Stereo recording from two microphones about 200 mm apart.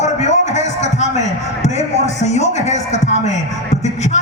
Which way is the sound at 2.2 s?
35° left (ahead or behind).